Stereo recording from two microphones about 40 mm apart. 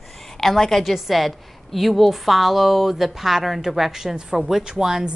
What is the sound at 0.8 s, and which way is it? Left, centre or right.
A woman's voice, centre.